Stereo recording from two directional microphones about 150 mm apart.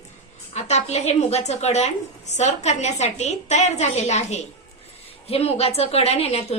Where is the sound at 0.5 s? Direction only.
45° left (ahead or behind).